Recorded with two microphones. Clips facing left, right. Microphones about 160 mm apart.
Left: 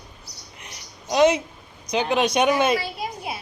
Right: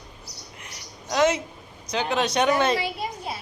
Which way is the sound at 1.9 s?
15° left (ahead or behind).